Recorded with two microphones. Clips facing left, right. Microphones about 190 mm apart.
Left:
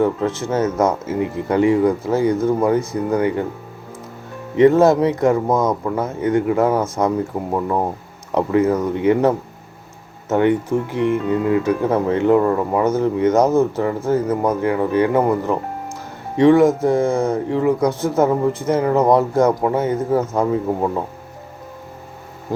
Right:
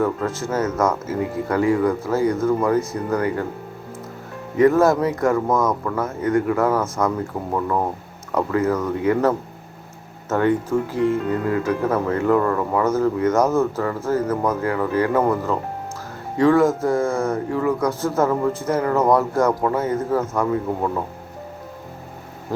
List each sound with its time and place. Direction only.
0.5 s speech: 20° left (ahead or behind)
4.5 s speech: 25° left (ahead or behind)